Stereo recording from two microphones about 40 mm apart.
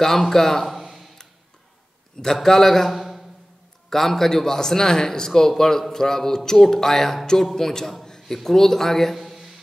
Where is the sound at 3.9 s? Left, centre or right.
Centre.